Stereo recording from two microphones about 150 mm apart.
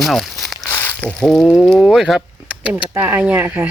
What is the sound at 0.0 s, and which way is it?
Crumpling, centre (ahead or behind).